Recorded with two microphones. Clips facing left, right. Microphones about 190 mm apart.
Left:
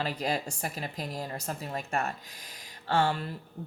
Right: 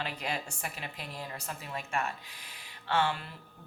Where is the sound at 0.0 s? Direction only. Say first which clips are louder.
Left 5 dB; 40° left (ahead or behind).